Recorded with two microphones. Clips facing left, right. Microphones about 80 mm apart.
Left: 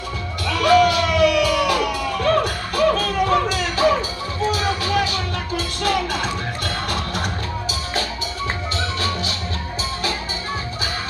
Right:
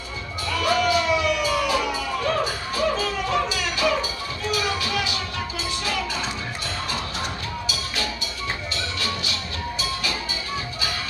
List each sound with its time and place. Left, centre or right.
0.5 s music: left